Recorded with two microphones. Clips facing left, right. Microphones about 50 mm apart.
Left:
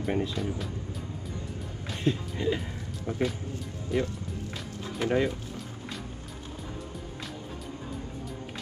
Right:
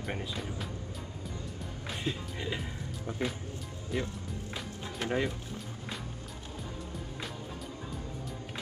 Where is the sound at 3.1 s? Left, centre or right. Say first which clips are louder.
Left 6 dB; centre.